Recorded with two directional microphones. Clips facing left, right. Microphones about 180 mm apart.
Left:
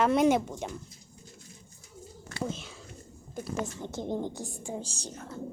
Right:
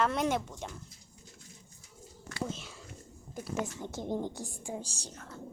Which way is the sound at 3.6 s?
10° right (ahead or behind).